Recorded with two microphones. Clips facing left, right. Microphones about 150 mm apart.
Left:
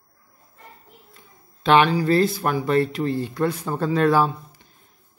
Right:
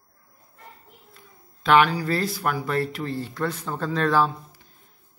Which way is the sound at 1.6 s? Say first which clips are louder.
Left 2 dB; 25° left (ahead or behind).